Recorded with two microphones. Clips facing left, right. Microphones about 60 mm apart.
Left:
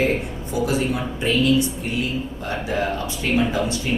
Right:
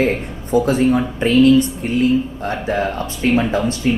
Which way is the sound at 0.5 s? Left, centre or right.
Right.